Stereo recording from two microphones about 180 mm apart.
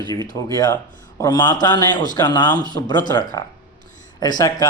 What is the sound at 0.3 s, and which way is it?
A man's voice, 20° left (ahead or behind).